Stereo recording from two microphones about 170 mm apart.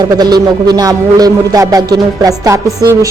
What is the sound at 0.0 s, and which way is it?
Speech, 25° right (ahead or behind).